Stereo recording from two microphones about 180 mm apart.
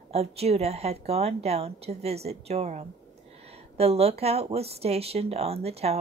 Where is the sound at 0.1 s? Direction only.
35° right (ahead or behind).